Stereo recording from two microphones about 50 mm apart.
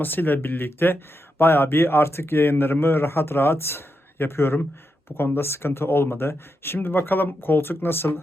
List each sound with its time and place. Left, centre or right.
0.0 s speech: left